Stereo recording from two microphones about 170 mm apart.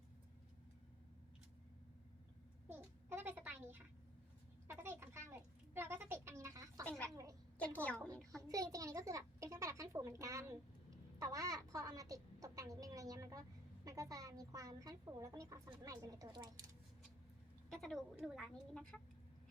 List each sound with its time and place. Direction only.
2.6 s babbling: 10° right (ahead or behind)
4.7 s a sound: 15° right (ahead or behind)
6.8 s speech: 10° left (ahead or behind)
8.4 s a woman's voice: 20° right (ahead or behind)
17.7 s a woman's voice: centre (ahead or behind)